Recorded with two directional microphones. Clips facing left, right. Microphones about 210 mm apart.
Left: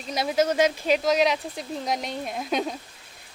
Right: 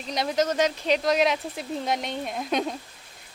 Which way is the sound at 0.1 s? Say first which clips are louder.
Left 2 dB; 5° left (ahead or behind).